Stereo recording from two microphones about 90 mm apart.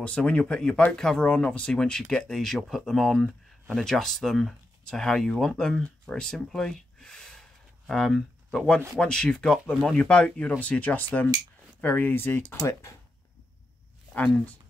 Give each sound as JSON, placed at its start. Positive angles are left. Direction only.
{"t": 0.0, "sound": "speech", "side_deg": 15}
{"t": 9.9, "sound": "speech", "side_deg": 10}
{"t": 14.1, "sound": "speech", "side_deg": 15}